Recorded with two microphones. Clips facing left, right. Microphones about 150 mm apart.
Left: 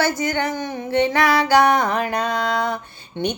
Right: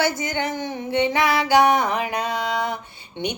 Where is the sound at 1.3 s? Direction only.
15° right (ahead or behind).